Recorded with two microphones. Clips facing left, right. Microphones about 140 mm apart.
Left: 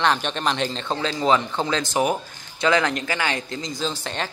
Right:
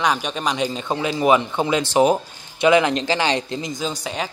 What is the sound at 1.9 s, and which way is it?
Speech, 25° right (ahead or behind).